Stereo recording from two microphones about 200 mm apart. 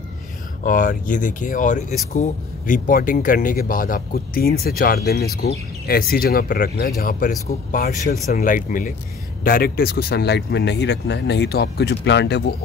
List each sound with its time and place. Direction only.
0.7 s speech: 40° left (ahead or behind); by 12.5 s 55° left (ahead or behind)